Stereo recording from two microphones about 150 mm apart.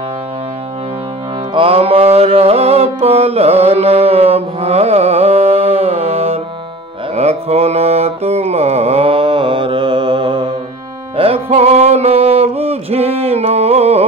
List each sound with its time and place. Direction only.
1.5 s music: 40° right (ahead or behind)
7.2 s mantra: 45° right (ahead or behind)
11.1 s music: 40° right (ahead or behind)